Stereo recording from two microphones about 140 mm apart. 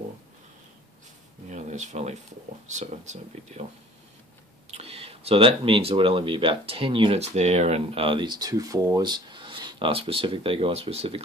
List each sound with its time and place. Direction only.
1.5 s speech: 60° right (ahead or behind)
4.6 s speech: 50° right (ahead or behind)